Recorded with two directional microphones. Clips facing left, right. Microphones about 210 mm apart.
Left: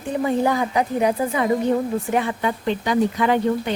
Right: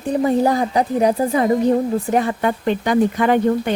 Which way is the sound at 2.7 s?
50° right (ahead or behind).